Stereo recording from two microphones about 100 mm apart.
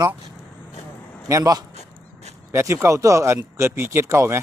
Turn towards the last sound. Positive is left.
turn(degrees=-30)  # may be behind; listen again after turning